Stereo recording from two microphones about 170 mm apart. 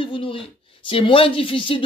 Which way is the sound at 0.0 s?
30° left (ahead or behind).